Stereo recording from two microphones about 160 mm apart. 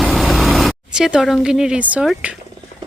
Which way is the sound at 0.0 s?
Centre (ahead or behind).